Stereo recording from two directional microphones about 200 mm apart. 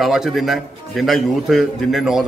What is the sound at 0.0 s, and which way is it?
Speech, centre (ahead or behind).